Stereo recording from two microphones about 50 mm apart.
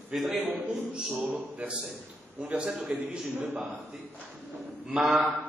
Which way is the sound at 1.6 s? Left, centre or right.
Right.